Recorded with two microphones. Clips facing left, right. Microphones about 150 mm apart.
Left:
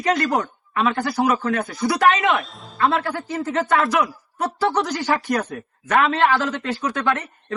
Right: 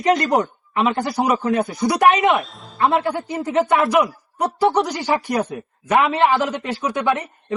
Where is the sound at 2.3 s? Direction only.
Centre (ahead or behind).